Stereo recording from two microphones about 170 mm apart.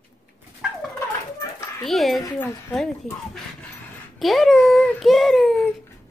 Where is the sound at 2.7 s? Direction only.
Centre (ahead or behind).